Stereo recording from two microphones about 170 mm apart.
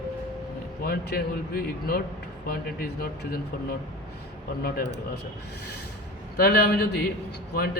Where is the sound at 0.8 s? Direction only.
65° left (ahead or behind).